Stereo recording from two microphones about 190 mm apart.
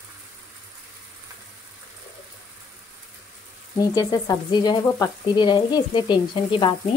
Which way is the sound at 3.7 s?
20° left (ahead or behind).